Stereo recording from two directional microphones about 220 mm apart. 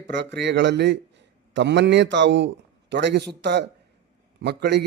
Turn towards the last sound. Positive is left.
turn(degrees=-50)  # may be behind; listen again after turning